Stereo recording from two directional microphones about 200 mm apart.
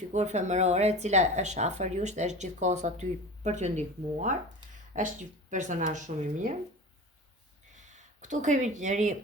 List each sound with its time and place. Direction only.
0.1 s speech: 35° right (ahead or behind)
7.8 s speech: 35° right (ahead or behind)